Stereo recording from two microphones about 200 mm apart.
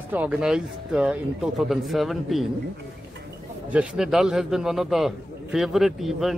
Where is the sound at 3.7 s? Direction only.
5° right (ahead or behind).